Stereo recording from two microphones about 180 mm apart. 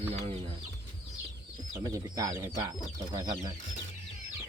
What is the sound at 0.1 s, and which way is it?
Chicken, 35° right (ahead or behind).